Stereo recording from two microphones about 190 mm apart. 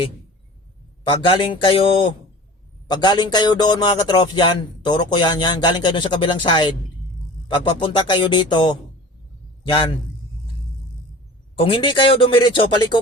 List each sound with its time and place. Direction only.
1.0 s speech: 25° left (ahead or behind)
11.5 s speech: 30° left (ahead or behind)